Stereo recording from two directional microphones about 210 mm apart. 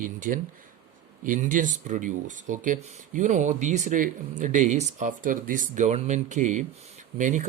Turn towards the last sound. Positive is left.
turn(degrees=-35)  # may be behind; listen again after turning